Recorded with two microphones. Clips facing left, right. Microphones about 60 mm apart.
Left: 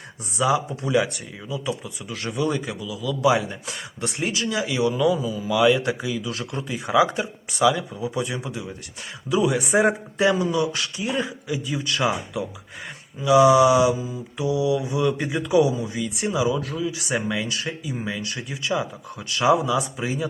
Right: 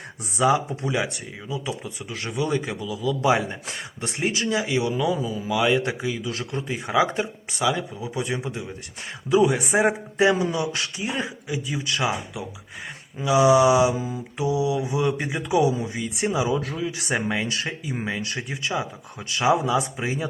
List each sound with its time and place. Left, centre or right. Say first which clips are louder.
0.3 s speech: right 1 dB; right
2.6 s mantra: right 1 dB; right
5.1 s mantra: left 2 dB; right
7.6 s speech: left 4 dB; right
9.3 s mantra: right 1 dB; right
9.8 s speech: even; right
11.7 s speech: left 2 dB; centre
13.2 s speech: left 2 dB; right
13.7 s mantra: left 1 dB; right